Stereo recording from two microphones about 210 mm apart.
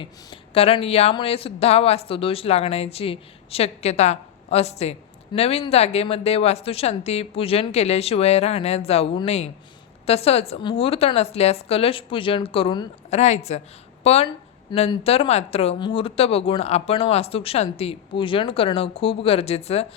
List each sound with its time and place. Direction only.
0.0 s a woman's voice: 25° left (ahead or behind)